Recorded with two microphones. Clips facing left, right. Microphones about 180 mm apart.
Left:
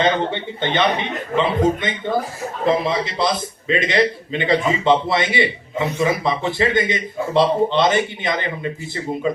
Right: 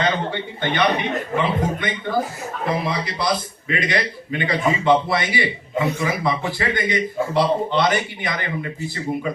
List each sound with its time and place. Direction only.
0.0 s a man's voice: 20° left (ahead or behind)